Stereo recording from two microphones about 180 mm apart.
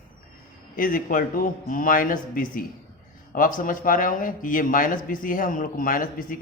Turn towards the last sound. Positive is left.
turn(degrees=50)  # may be behind; listen again after turning